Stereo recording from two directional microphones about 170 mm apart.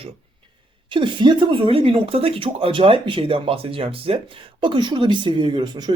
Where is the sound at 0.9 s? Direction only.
30° right (ahead or behind).